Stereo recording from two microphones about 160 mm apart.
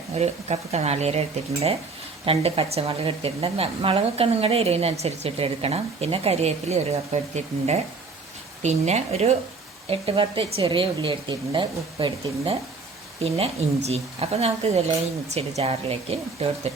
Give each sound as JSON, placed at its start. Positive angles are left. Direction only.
{"t": 0.2, "sound": "a woman's voice", "side_deg": -40}